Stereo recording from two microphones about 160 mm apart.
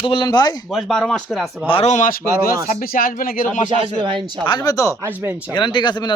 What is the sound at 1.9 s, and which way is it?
Speech, 55° left (ahead or behind).